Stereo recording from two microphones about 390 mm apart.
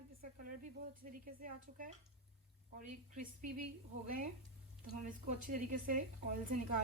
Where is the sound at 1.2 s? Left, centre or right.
Right.